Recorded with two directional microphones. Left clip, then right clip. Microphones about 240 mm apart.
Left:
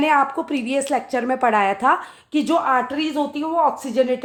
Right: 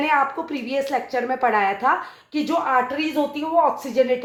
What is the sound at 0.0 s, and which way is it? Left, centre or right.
A woman's voice, left.